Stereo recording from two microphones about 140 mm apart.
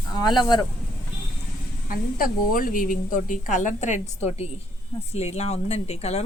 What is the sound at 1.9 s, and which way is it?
A woman's voice, 85° left.